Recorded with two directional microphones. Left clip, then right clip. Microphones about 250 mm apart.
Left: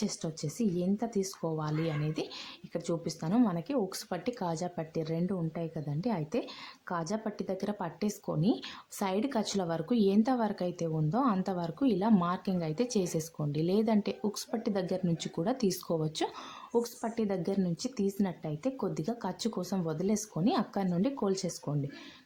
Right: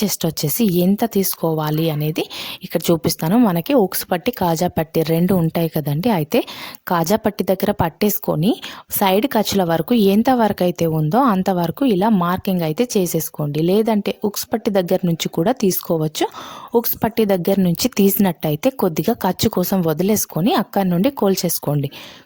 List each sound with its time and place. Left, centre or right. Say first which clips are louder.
0.0 s a woman's voice: right 15 dB; right